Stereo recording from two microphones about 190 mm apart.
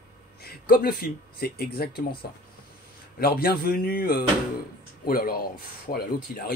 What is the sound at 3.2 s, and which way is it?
Speech, 50° left (ahead or behind).